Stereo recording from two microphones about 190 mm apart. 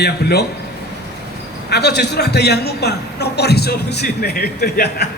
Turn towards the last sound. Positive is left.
turn(degrees=60)  # may be behind; listen again after turning